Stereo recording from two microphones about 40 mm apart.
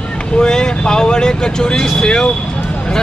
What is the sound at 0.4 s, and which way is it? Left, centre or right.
Speech, centre.